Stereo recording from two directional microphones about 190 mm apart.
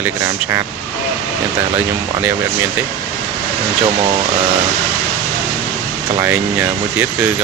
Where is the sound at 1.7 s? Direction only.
10° right (ahead or behind).